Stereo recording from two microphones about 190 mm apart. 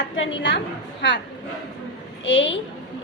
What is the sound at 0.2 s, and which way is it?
Speech, 75° left (ahead or behind).